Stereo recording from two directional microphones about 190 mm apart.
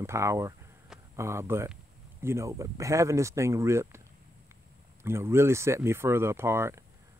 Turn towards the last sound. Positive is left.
turn(degrees=-15)  # may be behind; listen again after turning